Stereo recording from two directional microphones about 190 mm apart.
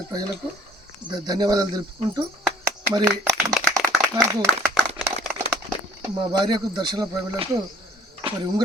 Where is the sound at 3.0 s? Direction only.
15° right (ahead or behind).